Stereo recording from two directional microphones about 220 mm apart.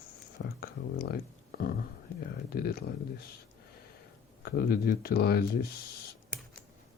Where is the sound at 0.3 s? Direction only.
45° left (ahead or behind).